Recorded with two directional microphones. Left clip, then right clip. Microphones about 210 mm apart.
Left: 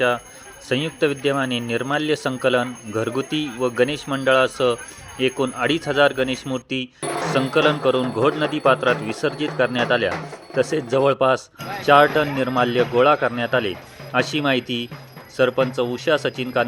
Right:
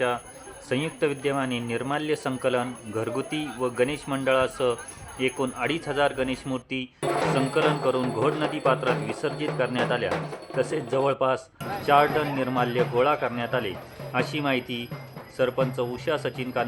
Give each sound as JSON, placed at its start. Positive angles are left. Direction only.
{"t": 0.7, "sound": "speech", "side_deg": 15}